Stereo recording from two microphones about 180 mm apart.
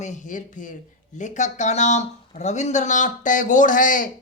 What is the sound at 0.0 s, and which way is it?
Speech, 40° left (ahead or behind).